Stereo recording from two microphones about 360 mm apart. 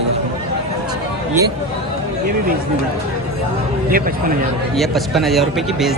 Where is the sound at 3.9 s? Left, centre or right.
Right.